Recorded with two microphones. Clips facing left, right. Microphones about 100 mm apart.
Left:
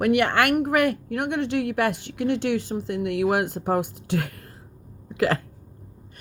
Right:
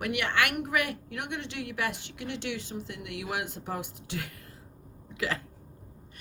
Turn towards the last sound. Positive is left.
turn(degrees=55)  # may be behind; listen again after turning